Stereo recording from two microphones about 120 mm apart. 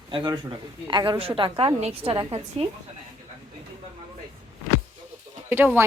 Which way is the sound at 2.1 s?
45° right (ahead or behind).